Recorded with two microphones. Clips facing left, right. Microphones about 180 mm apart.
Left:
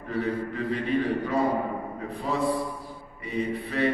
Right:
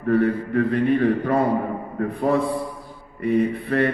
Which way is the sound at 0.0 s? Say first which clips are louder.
Right 9 dB; 55° right (ahead or behind).